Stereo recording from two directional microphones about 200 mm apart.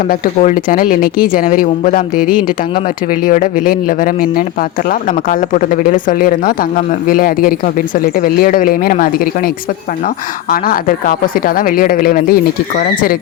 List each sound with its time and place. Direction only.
0.1 s speech: 40° left (ahead or behind)
10.5 s speech: 45° left (ahead or behind)